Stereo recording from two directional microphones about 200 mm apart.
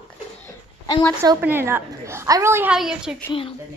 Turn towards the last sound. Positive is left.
turn(degrees=25)  # may be behind; listen again after turning